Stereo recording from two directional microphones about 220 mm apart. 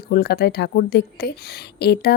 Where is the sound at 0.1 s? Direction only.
45° left (ahead or behind).